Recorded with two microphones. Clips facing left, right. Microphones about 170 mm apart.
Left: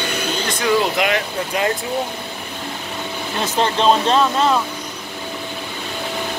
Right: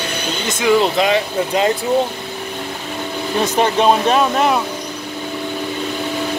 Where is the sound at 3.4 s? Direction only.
15° right (ahead or behind).